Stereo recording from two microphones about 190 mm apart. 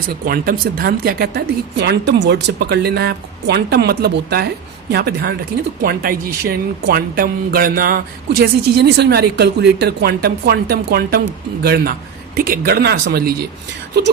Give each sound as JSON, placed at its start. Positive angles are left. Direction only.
{"t": 0.1, "sound": "speech", "side_deg": -50}